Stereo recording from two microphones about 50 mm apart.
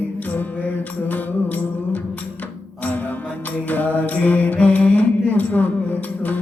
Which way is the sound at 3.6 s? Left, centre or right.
Left.